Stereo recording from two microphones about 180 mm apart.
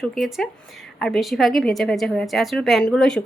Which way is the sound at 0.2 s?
5° right (ahead or behind).